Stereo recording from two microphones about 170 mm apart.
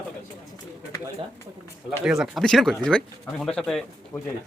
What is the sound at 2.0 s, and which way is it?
Speech, centre (ahead or behind).